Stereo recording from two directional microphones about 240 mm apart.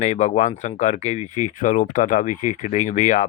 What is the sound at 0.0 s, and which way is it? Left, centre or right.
Speech, left.